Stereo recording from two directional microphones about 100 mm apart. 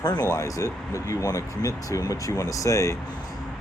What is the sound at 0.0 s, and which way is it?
Speech, 40° left (ahead or behind).